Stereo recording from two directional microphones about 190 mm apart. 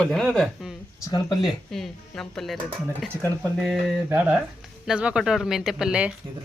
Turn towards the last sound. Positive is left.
turn(degrees=-5)  # may be behind; listen again after turning